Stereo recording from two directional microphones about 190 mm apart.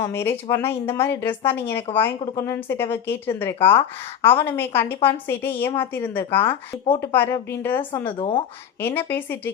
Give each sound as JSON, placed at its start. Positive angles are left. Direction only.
{"t": 0.0, "sound": "speech", "side_deg": 15}
{"t": 8.2, "sound": "speech", "side_deg": 25}
{"t": 8.8, "sound": "speech", "side_deg": 10}